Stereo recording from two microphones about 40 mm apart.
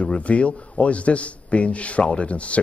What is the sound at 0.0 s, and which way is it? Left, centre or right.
A man's voice, left.